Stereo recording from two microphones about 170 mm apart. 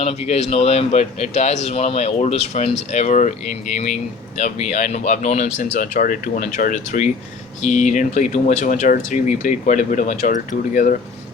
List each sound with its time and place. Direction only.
0.0 s speech: 35° left (ahead or behind)
5.5 s speech: 55° left (ahead or behind)